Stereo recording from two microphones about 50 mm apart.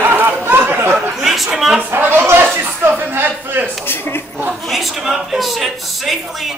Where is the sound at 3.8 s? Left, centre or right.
Left.